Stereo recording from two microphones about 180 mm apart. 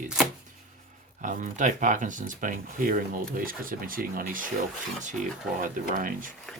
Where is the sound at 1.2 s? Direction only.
45° right (ahead or behind).